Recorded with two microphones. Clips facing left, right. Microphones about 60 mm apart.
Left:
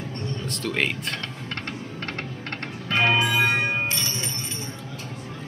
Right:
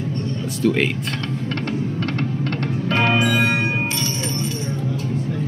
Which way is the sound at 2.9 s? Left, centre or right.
Right.